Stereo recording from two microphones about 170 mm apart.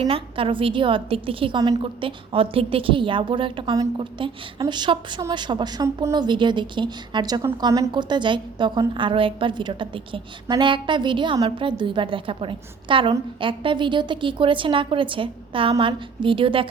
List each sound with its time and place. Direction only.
0.1 s a woman's voice: 30° right (ahead or behind)